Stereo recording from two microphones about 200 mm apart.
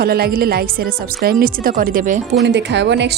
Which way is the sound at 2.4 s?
60° right (ahead or behind).